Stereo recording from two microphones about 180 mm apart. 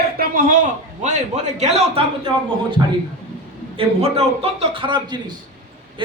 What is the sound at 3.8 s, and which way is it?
A man's voice, 35° right (ahead or behind).